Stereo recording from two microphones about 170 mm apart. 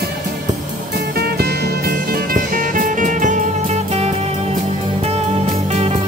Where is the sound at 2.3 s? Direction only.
55° right (ahead or behind).